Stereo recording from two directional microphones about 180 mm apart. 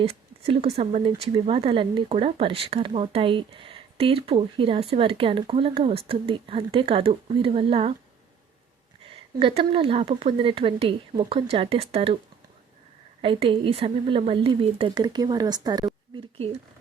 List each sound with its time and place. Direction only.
0.0 s speech: 35° right (ahead or behind)
9.4 s speech: 30° right (ahead or behind)
13.2 s speech: 30° right (ahead or behind)